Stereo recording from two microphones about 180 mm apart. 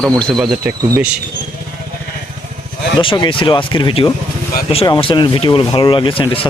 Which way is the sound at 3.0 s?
30° left (ahead or behind).